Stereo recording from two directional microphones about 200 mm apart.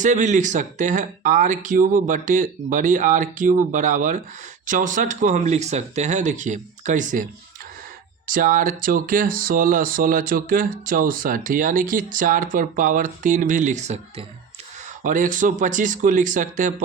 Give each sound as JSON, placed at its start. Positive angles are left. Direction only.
{"t": 0.0, "sound": "speech", "side_deg": -40}
{"t": 8.3, "sound": "speech", "side_deg": -45}